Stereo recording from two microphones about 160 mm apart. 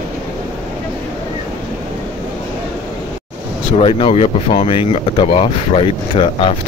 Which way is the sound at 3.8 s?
35° left (ahead or behind).